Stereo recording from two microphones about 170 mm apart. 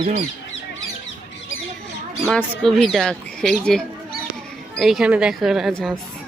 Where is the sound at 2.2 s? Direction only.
5° left (ahead or behind).